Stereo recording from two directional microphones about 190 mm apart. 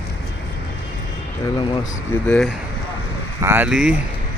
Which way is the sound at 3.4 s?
10° right (ahead or behind).